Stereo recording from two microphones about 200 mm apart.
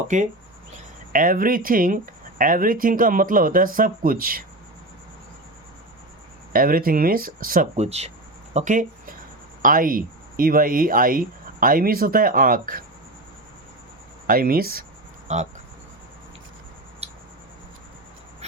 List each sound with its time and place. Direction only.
0.1 s speech: 40° right (ahead or behind)
6.5 s speech: 45° right (ahead or behind)
14.3 s speech: 45° right (ahead or behind)
15.3 s speech: 35° right (ahead or behind)